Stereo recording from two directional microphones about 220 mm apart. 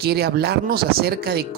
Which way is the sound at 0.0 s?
45° right (ahead or behind).